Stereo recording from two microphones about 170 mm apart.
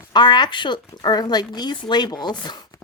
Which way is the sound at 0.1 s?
25° left (ahead or behind).